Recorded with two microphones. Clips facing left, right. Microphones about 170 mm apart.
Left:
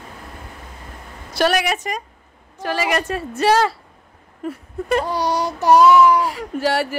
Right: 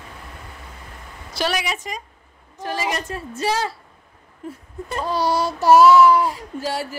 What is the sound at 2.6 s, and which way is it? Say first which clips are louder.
Speech: left 4 dB; 75° left (ahead or behind).